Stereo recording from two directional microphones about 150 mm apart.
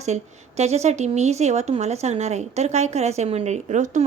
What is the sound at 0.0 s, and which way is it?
Speech, 50° right (ahead or behind).